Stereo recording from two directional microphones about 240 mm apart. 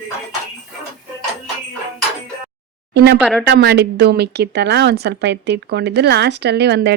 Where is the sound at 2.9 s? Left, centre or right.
Right.